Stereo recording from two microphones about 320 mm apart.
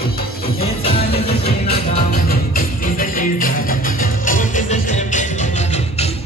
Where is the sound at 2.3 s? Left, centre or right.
Left.